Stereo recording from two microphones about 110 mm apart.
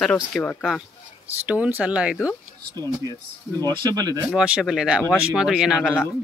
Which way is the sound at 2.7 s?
35° right (ahead or behind).